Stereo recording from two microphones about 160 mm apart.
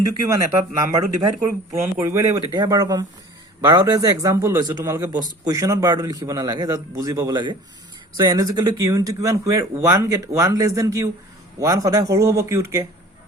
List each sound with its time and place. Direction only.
0.0 s speech: 20° right (ahead or behind)